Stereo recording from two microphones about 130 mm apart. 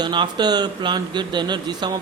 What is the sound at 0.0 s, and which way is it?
A man's voice, 35° right (ahead or behind).